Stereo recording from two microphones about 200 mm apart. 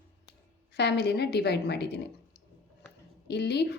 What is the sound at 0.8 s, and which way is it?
A woman's voice, 55° left (ahead or behind).